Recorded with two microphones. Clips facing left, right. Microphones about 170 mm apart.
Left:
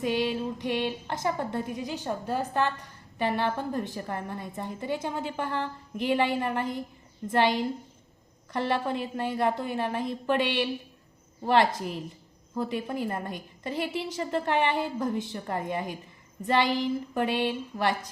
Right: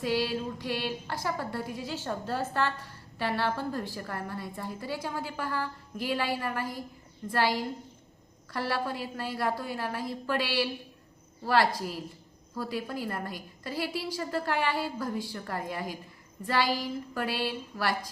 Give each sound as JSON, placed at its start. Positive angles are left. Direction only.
{"t": 0.0, "sound": "speech", "side_deg": 20}